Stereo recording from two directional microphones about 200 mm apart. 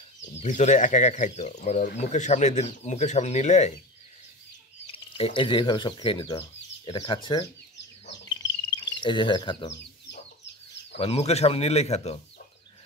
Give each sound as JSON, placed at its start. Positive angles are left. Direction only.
{"t": 0.4, "sound": "speech", "side_deg": 35}
{"t": 5.1, "sound": "speech", "side_deg": 25}
{"t": 8.3, "sound": "chirp", "side_deg": 25}
{"t": 11.0, "sound": "speech", "side_deg": 30}